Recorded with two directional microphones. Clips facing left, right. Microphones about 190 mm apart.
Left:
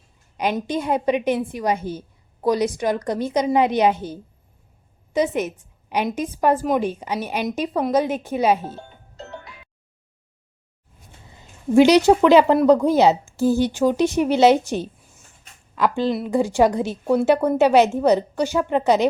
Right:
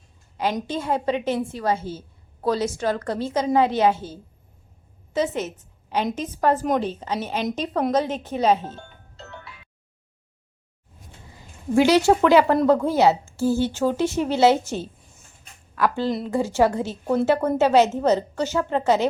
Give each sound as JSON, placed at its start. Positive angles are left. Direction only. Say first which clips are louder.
{"t": 0.7, "sound": "a woman's voice", "louder": "left 6 dB", "side_deg": 15}
{"t": 9.1, "sound": "music", "louder": "left 5 dB", "side_deg": 40}
{"t": 11.7, "sound": "a woman's voice", "louder": "left 4 dB", "side_deg": 20}